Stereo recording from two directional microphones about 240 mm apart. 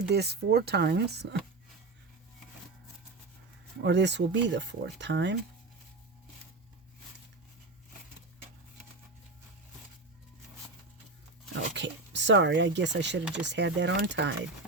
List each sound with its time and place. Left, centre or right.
0.1 s speech: right
3.8 s speech: right
11.7 s speech: right